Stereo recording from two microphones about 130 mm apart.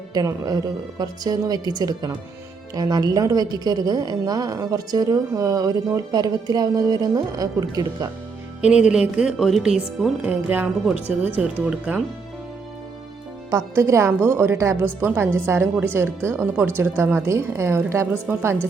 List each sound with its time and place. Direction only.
0.1 s a woman's voice: 30° right (ahead or behind)
8.6 s speech: 10° right (ahead or behind)
13.5 s a woman's voice: 25° right (ahead or behind)